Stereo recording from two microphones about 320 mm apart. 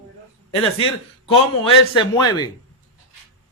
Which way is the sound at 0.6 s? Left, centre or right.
Centre.